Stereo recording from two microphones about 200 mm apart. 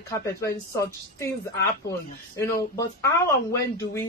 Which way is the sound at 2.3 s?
15° left (ahead or behind).